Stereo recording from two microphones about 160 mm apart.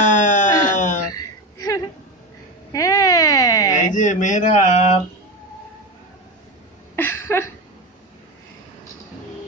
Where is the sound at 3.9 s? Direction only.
50° left (ahead or behind).